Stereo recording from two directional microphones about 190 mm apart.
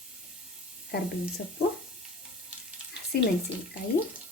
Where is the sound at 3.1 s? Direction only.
55° left (ahead or behind).